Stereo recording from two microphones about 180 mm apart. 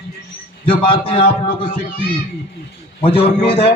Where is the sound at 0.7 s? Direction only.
30° left (ahead or behind).